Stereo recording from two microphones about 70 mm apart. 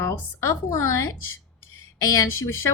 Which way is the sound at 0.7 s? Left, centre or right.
Left.